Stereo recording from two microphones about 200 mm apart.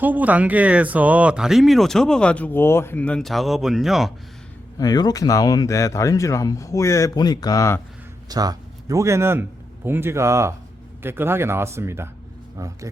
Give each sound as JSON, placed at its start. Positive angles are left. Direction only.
{"t": 0.0, "sound": "speech", "side_deg": -10}
{"t": 4.8, "sound": "speech", "side_deg": 20}
{"t": 8.3, "sound": "a man's voice", "side_deg": -20}